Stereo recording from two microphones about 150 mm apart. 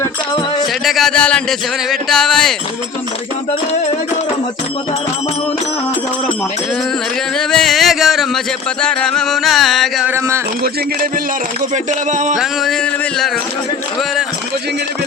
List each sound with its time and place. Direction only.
0.9 s a man's voice: centre (ahead or behind)
7.3 s a sound: 5° left (ahead or behind)
8.8 s a man's voice: 5° left (ahead or behind)
10.1 s a man's voice: 20° right (ahead or behind)
11.7 s a sound: 50° right (ahead or behind)
12.4 s a man's voice: centre (ahead or behind)